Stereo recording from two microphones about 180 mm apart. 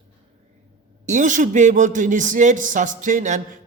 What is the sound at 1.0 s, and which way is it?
A man's voice, 45° right (ahead or behind).